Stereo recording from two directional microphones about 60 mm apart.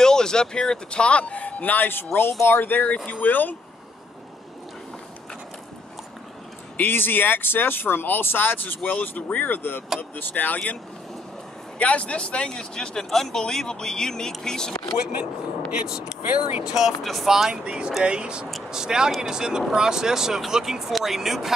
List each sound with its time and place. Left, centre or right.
0.0 s speech: centre; by 3.5 s left
6.8 s speech: left
11.8 s speech: left
15.7 s speech: centre
16.2 s speech: right
16.6 s speech: centre